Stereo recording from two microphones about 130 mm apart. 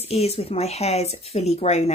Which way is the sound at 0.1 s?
50° left (ahead or behind).